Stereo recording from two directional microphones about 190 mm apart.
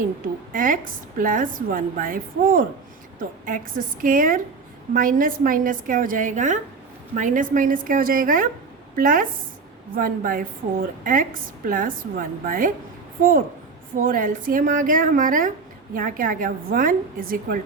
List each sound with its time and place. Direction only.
0.5 s a woman's voice: 45° right (ahead or behind)
14.0 s a woman's voice: 45° right (ahead or behind)